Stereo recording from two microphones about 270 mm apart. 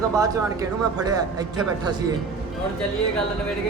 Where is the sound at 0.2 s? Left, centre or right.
Centre.